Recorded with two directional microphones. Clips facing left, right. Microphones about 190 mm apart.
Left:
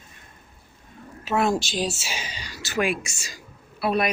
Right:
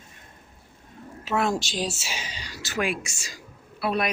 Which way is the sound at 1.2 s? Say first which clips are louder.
Left 2 dB; 5° left (ahead or behind).